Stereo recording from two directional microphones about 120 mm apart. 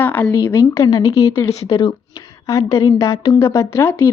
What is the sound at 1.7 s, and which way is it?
Speech, 40° left (ahead or behind).